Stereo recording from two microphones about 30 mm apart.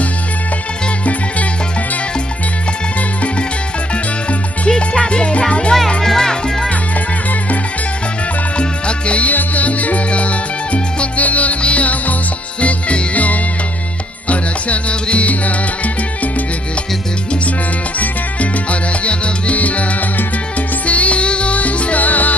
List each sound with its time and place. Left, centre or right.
4.6 s music: left
5.7 s music: centre
8.5 s music: left
9.3 s music: left
17.9 s music: left
22.0 s music: left